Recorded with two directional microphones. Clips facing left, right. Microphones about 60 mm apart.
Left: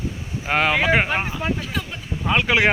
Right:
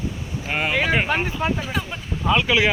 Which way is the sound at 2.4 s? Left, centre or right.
Left.